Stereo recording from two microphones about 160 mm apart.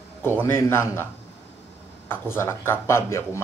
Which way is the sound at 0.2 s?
15° left (ahead or behind).